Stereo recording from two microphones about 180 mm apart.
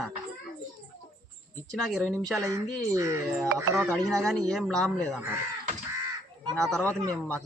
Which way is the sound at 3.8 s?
5° left (ahead or behind).